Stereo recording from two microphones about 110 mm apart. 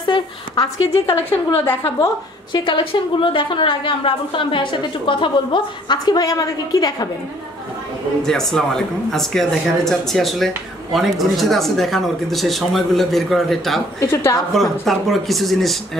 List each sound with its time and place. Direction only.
0.0 s a sound: 45° left (ahead or behind)
2.5 s a woman's voice: 45° left (ahead or behind)
8.2 s speech: 5° left (ahead or behind)
13.9 s a woman's voice: 25° left (ahead or behind)
14.5 s speech: centre (ahead or behind)